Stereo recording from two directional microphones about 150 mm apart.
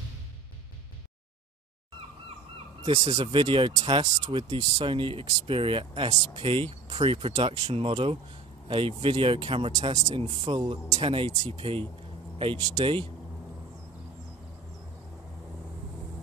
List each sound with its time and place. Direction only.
2.8 s speech: 30° right (ahead or behind)